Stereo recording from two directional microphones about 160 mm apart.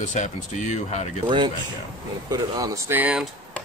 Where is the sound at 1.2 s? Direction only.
30° right (ahead or behind); by 3.3 s 5° right (ahead or behind).